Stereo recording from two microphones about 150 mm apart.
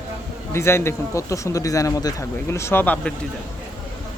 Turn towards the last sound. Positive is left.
turn(degrees=10)  # may be behind; listen again after turning